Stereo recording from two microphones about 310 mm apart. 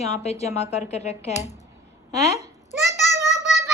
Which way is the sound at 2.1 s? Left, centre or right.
Left.